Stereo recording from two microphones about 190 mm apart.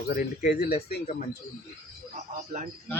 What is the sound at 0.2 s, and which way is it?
Speech, 55° left (ahead or behind).